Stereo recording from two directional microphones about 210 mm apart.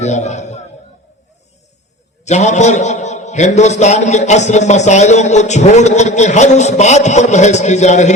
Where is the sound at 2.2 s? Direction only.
35° left (ahead or behind).